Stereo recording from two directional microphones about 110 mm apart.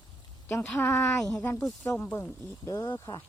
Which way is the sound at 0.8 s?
25° left (ahead or behind).